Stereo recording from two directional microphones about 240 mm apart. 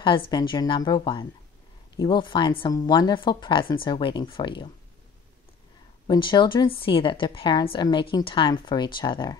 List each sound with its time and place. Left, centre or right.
0.0 s a woman's voice: centre
6.0 s a woman's voice: centre